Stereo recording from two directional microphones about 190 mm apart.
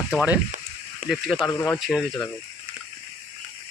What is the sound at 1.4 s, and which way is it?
Speech, 15° left (ahead or behind).